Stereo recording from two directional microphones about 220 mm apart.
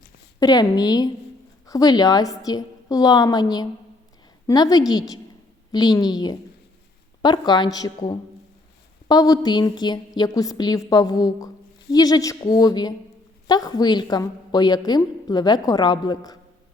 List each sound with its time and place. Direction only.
0.3 s a woman's voice: 15° left (ahead or behind)